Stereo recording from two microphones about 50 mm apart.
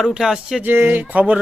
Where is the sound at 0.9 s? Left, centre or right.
Right.